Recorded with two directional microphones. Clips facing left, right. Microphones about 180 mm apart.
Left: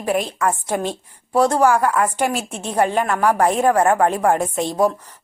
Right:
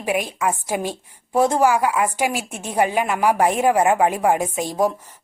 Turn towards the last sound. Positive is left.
turn(degrees=-10)  # may be behind; listen again after turning